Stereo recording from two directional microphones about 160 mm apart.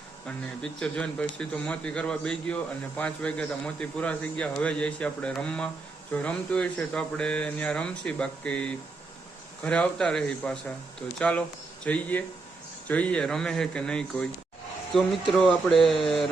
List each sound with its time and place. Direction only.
0.3 s a man's voice: 5° left (ahead or behind)